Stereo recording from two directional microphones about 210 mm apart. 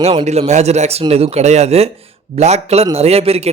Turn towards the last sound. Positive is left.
turn(degrees=-30)  # may be behind; listen again after turning